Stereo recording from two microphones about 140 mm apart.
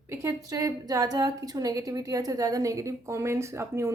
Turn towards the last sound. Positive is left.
turn(degrees=-20)  # may be behind; listen again after turning